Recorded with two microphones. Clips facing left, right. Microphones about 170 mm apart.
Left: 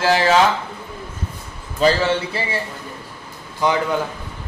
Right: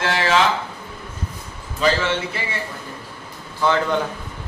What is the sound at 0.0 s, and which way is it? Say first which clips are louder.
Speech: left 5 dB; 35° left (ahead or behind).